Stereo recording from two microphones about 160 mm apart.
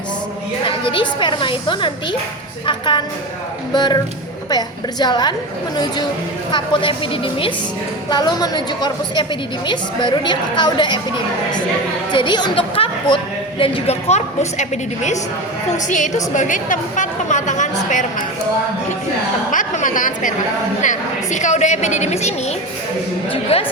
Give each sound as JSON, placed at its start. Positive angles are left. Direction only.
{"t": 0.6, "sound": "a woman's voice", "side_deg": 30}
{"t": 12.1, "sound": "chatter", "side_deg": 30}
{"t": 13.6, "sound": "a woman's voice", "side_deg": 35}
{"t": 19.5, "sound": "a woman's voice", "side_deg": 55}